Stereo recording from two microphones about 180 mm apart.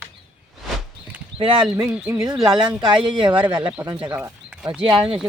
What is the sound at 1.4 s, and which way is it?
Speech, 30° right (ahead or behind).